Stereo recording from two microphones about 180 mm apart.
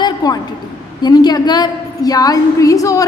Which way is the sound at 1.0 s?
20° left (ahead or behind).